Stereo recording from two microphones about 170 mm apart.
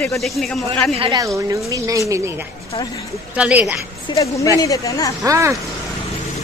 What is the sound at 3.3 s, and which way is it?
Speech, 10° right (ahead or behind).